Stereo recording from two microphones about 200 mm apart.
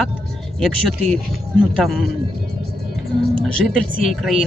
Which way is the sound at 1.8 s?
Centre (ahead or behind).